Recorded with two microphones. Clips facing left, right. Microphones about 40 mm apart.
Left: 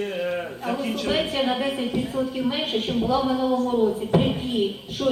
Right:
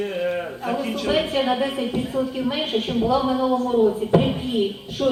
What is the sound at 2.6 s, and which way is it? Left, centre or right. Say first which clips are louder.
Speech: right 2 dB; right.